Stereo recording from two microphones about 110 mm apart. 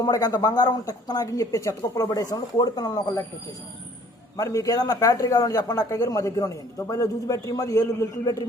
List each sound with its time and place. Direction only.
0.0 s a man's voice: 35° left (ahead or behind)
4.4 s a man's voice: 30° left (ahead or behind)